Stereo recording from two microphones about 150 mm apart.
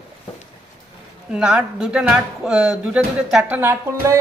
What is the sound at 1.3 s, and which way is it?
A man's voice, 5° right (ahead or behind).